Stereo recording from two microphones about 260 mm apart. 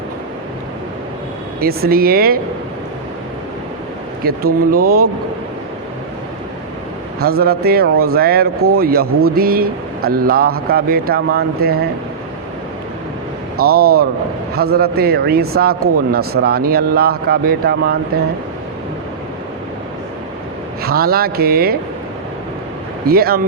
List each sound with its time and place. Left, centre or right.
1.6 s speech: right
4.2 s speech: right
7.2 s speech: right
13.6 s speech: right
20.8 s speech: right
23.0 s speech: right